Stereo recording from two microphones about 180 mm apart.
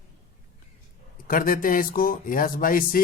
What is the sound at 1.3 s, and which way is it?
A man's voice, 50° left (ahead or behind).